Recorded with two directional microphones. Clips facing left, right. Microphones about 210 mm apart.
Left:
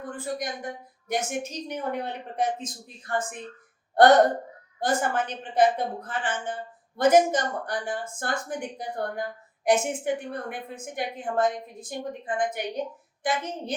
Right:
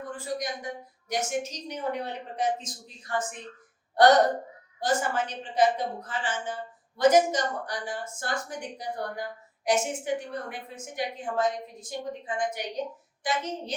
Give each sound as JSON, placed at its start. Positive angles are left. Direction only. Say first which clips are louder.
{"t": 0.3, "sound": "a woman's voice", "louder": "left 1 dB", "side_deg": 55}
{"t": 4.8, "sound": "a woman's voice", "louder": "left 1 dB", "side_deg": 55}